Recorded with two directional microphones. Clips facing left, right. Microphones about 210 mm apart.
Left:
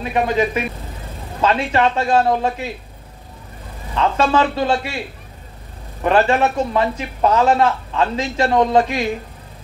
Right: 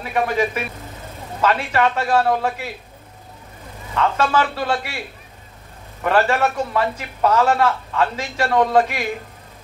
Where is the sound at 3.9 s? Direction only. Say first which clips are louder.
Left 2 dB; 25° left (ahead or behind).